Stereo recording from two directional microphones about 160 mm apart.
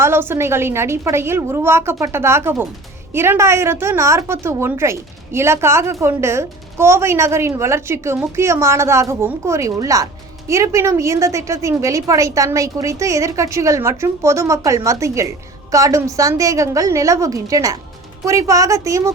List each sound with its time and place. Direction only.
0.0 s a woman's voice: 15° right (ahead or behind)